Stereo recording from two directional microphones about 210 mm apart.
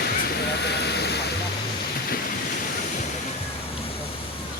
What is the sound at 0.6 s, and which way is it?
Vehicle, 50° left (ahead or behind).